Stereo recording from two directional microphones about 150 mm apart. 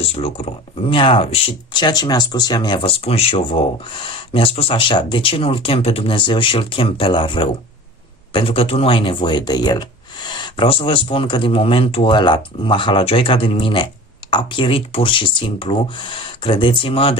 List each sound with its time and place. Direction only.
0.1 s speech: 40° left (ahead or behind)